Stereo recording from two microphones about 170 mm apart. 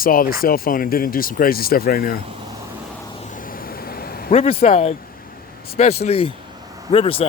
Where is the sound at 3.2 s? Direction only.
50° left (ahead or behind).